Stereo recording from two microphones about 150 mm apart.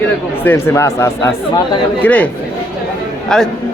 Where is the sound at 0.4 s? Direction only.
15° left (ahead or behind).